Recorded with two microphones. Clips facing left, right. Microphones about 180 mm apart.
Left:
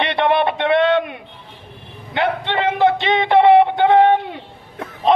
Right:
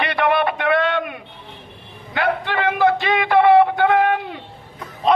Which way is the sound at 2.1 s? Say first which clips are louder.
Left 1 dB; 20° left (ahead or behind).